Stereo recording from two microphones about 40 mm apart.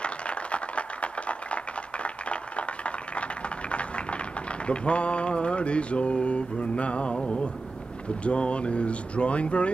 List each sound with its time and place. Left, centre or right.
0.0 s a sound: left
4.6 s mantra: left
8.2 s speech: left